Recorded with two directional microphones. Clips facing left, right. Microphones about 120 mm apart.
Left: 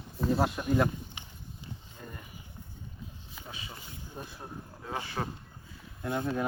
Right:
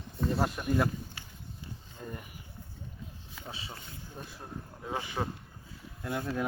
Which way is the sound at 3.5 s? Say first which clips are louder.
Right 1 dB; 30° right (ahead or behind).